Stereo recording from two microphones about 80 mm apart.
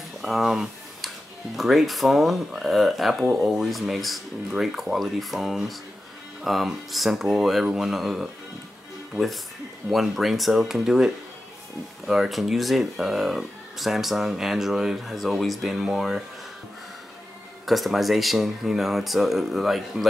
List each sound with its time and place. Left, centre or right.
0.2 s a sound: centre
1.6 s speech: centre
12.1 s speech: centre
17.6 s speech: centre